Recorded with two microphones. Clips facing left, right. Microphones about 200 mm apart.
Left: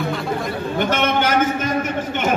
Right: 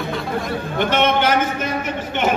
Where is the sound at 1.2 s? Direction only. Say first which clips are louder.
Left 1 dB; 45° left (ahead or behind).